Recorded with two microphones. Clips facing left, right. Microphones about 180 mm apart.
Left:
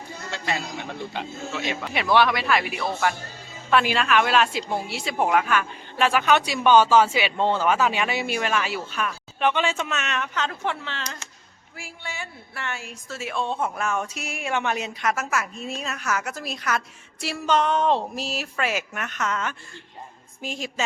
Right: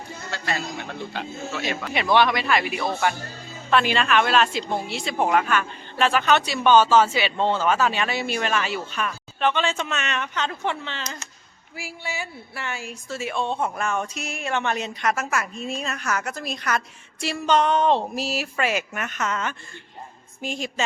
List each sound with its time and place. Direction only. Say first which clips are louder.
0.3 s a man's voice: even; 20° left (ahead or behind)
1.8 s a woman's voice: right 1 dB; 5° left (ahead or behind)